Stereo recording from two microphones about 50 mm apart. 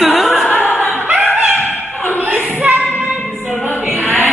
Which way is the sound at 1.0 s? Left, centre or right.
Right.